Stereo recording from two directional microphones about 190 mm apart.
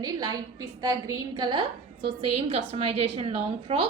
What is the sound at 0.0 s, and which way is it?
A woman's voice, 20° right (ahead or behind).